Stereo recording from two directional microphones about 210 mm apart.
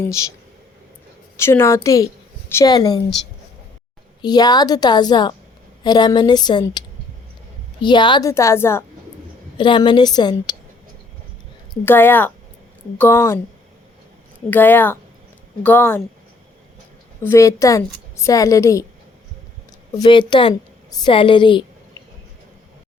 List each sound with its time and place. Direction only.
1.4 s a woman's voice: 10° left (ahead or behind)
4.2 s a woman's voice: 20° left (ahead or behind)
9.6 s a woman's voice: 20° left (ahead or behind)
11.7 s a woman's voice: 10° left (ahead or behind)
14.5 s a woman's voice: 10° left (ahead or behind)
17.2 s a woman's voice: 15° left (ahead or behind)
19.9 s a woman's voice: 20° left (ahead or behind)